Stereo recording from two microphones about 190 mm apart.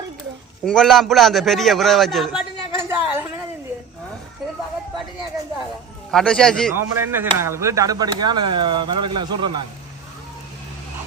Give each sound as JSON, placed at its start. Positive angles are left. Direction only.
{"t": 0.6, "sound": "a man's voice", "side_deg": 5}
{"t": 2.9, "sound": "a sound", "side_deg": -10}
{"t": 6.1, "sound": "a man's voice", "side_deg": 5}
{"t": 6.7, "sound": "speech", "side_deg": -10}